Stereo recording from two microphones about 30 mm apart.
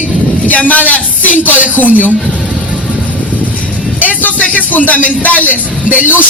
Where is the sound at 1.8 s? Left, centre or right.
Left.